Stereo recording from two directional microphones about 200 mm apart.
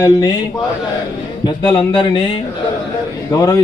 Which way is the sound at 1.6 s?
20° left (ahead or behind).